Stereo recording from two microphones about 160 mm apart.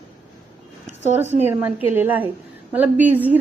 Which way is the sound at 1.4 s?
15° right (ahead or behind).